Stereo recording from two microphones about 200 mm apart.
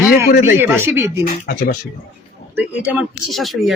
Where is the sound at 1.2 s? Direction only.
45° left (ahead or behind).